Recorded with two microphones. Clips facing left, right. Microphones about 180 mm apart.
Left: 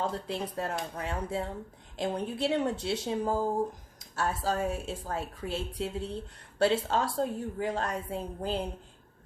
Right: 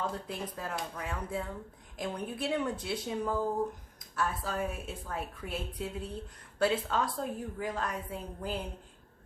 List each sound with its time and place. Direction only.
0.0 s a woman's voice: 30° left (ahead or behind)